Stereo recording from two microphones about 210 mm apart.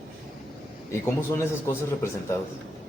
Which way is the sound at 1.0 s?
15° left (ahead or behind).